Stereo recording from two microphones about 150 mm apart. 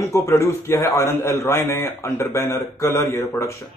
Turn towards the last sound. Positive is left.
turn(degrees=20)  # may be behind; listen again after turning